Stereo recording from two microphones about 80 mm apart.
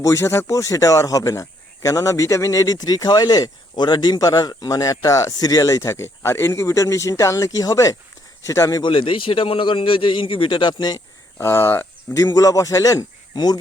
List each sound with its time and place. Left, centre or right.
0.0 s speech: left
8.8 s a man's voice: left
11.3 s speech: left
12.1 s speech: left